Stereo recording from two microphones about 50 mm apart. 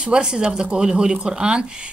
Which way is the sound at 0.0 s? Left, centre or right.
Centre.